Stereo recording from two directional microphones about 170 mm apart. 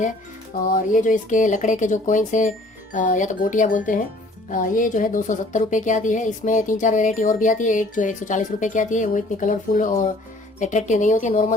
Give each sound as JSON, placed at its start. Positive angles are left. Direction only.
{"t": 0.7, "sound": "speech", "side_deg": 55}